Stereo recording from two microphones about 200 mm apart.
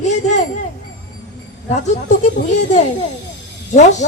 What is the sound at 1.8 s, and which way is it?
Speech, 35° left (ahead or behind).